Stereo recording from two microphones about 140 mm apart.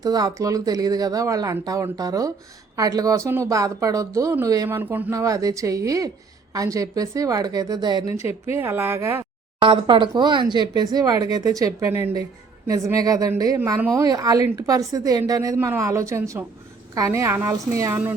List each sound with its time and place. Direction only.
0.0 s speech: 25° right (ahead or behind)
4.8 s speech: 15° right (ahead or behind)
5.1 s speech: 25° right (ahead or behind)
8.4 s speech: 15° right (ahead or behind)
9.6 s speech: 35° right (ahead or behind)